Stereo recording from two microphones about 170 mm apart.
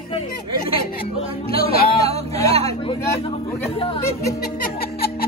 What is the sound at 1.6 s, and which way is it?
Speech, 65° left (ahead or behind).